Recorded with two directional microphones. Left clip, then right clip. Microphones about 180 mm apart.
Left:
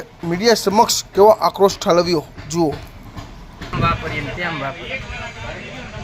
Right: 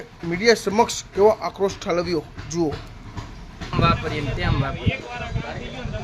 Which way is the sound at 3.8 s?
55° right (ahead or behind).